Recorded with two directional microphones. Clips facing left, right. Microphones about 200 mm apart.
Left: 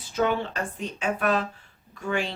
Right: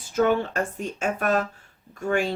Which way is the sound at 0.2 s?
45° right (ahead or behind).